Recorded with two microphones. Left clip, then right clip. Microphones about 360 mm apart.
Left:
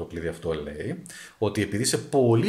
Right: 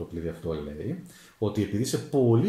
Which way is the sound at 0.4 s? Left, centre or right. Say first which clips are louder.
Left 4 dB; left.